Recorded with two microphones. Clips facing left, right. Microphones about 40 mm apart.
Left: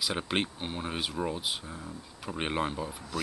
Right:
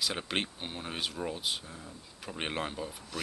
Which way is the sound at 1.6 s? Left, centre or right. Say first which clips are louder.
Left 5 dB; centre.